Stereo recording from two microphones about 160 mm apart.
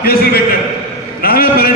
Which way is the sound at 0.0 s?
75° left (ahead or behind).